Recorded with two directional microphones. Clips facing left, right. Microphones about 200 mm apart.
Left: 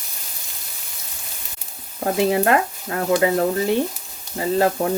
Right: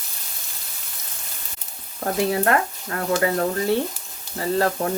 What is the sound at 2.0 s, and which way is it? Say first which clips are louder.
Speech: left 3 dB; 20° left (ahead or behind).